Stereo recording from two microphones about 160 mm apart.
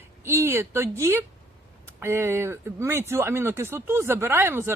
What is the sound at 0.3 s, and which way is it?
A woman's voice, 15° right (ahead or behind).